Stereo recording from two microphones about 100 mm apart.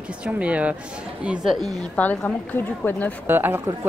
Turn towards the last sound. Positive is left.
turn(degrees=-20)  # may be behind; listen again after turning